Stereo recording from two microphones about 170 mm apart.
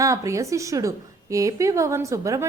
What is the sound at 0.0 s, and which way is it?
A woman's voice, 20° right (ahead or behind).